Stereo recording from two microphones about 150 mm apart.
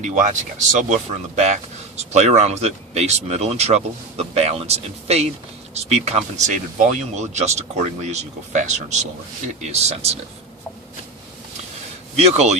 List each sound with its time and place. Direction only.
0.0 s speech: 55° right (ahead or behind)
2.1 s speech: 50° right (ahead or behind)
12.1 s speech: 45° right (ahead or behind)